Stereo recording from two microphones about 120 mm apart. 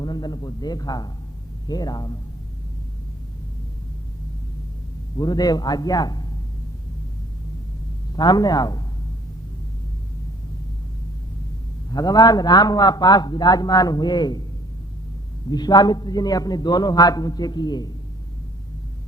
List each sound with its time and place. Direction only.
0.0 s a man's voice: 35° left (ahead or behind)
5.1 s a man's voice: 35° left (ahead or behind)
8.1 s a man's voice: 35° left (ahead or behind)
11.9 s a man's voice: 30° left (ahead or behind)
15.4 s a man's voice: 35° left (ahead or behind)